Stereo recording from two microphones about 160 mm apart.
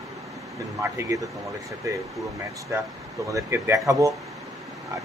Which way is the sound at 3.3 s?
20° right (ahead or behind).